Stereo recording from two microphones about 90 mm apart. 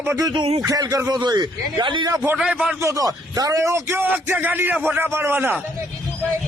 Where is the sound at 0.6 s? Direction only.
40° right (ahead or behind).